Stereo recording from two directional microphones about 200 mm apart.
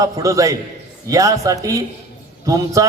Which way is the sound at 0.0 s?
15° right (ahead or behind).